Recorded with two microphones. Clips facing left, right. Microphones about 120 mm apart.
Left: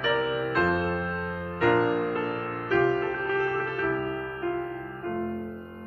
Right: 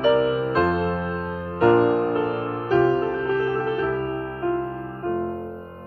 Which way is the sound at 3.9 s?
35° right (ahead or behind).